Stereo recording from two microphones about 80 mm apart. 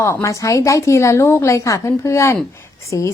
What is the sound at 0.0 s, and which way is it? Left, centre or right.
A woman's voice, left.